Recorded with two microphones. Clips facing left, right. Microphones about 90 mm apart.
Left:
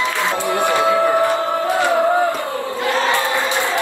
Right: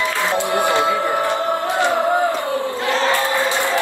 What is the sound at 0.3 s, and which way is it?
Music, 20° right (ahead or behind).